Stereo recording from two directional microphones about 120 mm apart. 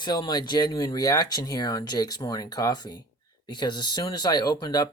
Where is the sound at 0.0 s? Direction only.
35° left (ahead or behind).